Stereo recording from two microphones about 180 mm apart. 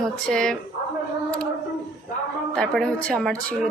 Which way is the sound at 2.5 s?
5° left (ahead or behind).